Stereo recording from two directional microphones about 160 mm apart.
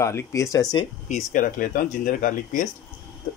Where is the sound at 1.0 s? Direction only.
50° left (ahead or behind).